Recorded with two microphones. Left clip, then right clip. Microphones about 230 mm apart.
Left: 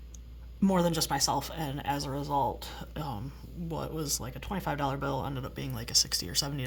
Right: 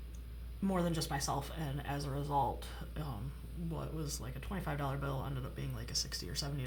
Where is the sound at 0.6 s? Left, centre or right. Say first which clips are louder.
Left 9 dB; left.